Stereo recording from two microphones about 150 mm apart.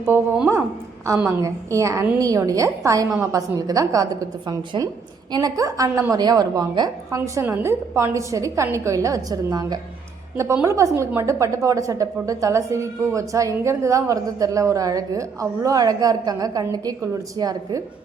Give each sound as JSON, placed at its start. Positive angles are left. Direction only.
{"t": 0.0, "sound": "a woman's voice", "side_deg": -15}